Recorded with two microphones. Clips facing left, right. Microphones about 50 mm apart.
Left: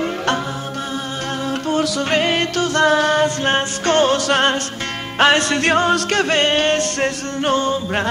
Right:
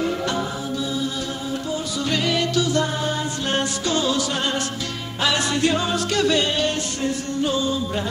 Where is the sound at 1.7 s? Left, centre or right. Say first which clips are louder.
Left 10 dB; left.